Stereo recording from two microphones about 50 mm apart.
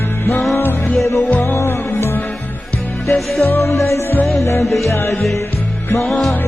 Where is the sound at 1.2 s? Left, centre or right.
Left.